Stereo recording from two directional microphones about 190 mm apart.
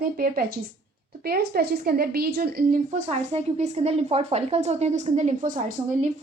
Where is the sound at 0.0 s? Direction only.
50° right (ahead or behind).